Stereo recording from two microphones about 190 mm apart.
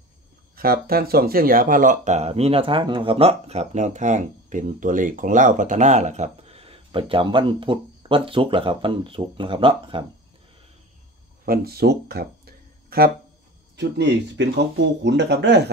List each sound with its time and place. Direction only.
0.6 s speech: 55° right (ahead or behind); by 10.0 s 25° right (ahead or behind)
11.4 s speech: 50° right (ahead or behind)
13.7 s speech: 65° right (ahead or behind)